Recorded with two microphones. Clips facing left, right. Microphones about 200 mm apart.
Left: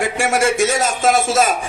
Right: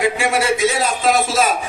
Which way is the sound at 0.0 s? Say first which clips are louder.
Left 1 dB; 45° left (ahead or behind).